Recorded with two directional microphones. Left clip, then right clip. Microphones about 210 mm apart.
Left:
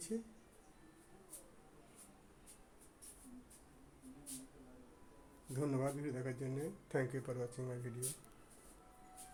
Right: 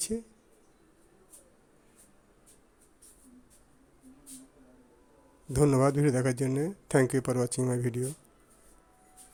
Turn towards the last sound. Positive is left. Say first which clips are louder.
# right 16 dB
turn(degrees=-45)  # may be behind; listen again after turning